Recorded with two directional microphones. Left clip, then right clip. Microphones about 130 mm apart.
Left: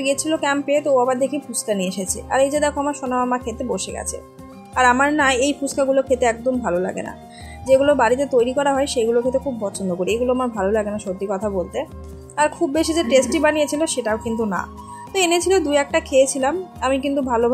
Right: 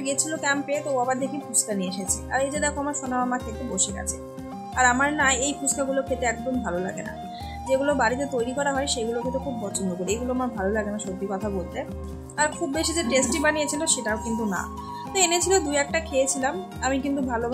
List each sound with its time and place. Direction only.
0.0 s a woman's voice: 35° left (ahead or behind)
12.4 s a woman's voice: 30° left (ahead or behind)